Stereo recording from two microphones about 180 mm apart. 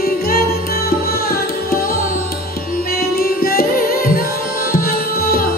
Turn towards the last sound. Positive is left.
turn(degrees=55)  # may be behind; listen again after turning